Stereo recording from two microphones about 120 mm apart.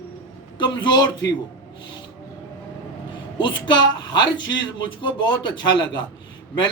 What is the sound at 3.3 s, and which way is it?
Speech, 40° left (ahead or behind).